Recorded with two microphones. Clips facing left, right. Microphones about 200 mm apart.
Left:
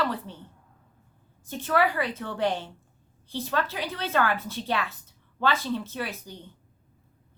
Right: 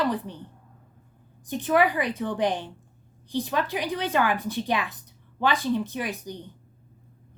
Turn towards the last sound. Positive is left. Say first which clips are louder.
# right 3 dB
turn(degrees=-15)  # may be behind; listen again after turning